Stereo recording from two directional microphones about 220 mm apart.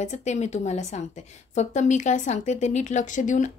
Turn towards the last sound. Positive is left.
turn(degrees=35)  # may be behind; listen again after turning